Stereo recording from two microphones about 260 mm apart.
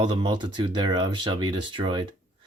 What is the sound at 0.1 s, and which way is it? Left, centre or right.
Speech, centre.